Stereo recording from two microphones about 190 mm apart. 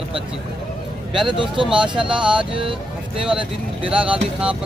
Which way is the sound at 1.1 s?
25° right (ahead or behind).